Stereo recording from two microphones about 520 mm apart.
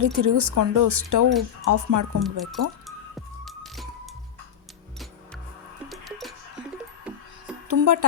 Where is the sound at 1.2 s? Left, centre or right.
Right.